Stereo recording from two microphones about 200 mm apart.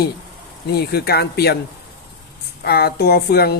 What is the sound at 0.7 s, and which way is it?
Speech, 50° left (ahead or behind).